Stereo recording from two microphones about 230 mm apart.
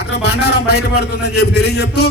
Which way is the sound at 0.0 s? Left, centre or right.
Left.